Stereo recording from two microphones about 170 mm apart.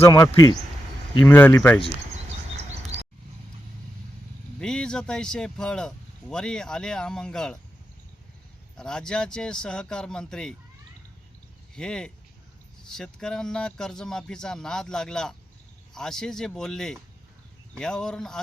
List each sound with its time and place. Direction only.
0.0 s speech: 20° left (ahead or behind)
1.2 s speech: 10° left (ahead or behind)
4.6 s speech: 5° left (ahead or behind)
8.7 s speech: 5° left (ahead or behind)
11.7 s speech: 5° left (ahead or behind)